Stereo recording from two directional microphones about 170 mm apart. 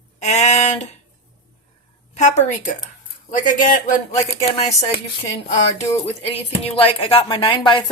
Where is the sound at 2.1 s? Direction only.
45° left (ahead or behind).